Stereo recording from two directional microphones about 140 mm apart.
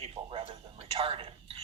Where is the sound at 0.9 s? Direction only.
40° right (ahead or behind).